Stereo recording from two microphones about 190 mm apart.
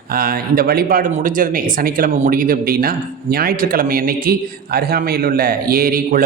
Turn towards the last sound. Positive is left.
turn(degrees=-50)  # may be behind; listen again after turning